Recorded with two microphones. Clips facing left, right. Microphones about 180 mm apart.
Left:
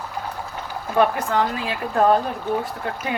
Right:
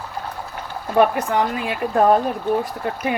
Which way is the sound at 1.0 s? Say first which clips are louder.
Right 2 dB; 15° right (ahead or behind).